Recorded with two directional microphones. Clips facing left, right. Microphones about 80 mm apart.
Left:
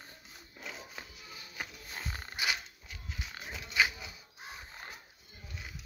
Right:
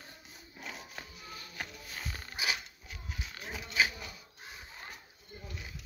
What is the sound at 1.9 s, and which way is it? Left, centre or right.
Roaring cats, left.